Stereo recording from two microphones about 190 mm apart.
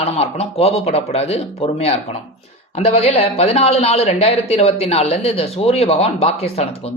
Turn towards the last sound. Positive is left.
turn(degrees=30)  # may be behind; listen again after turning